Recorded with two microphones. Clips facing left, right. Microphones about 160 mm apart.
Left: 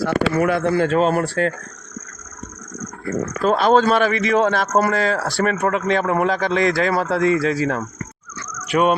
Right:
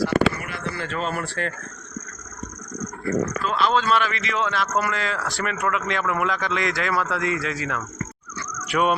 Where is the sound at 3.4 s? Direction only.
45° left (ahead or behind).